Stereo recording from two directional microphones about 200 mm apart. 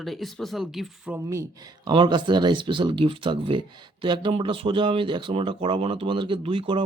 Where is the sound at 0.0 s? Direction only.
Centre (ahead or behind).